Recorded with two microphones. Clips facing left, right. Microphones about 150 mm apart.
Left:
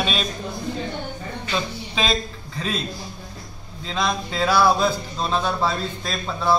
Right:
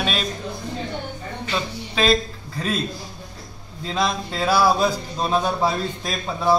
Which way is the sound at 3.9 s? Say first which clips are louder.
Right 1 dB; 5° right (ahead or behind).